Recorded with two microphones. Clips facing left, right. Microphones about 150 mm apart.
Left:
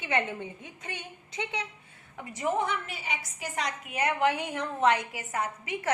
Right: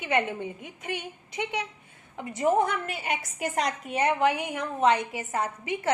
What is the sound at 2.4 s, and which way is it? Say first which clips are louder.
A woman's voice: right 5 dB; 40° right (ahead or behind).